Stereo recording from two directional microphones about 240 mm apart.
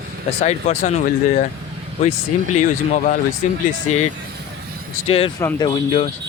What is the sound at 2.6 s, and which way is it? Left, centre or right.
Speech, left.